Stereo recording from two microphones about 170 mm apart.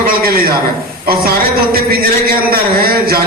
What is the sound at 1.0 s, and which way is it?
A man's voice, 60° right (ahead or behind).